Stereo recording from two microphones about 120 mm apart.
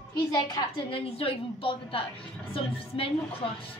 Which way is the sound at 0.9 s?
55° left (ahead or behind).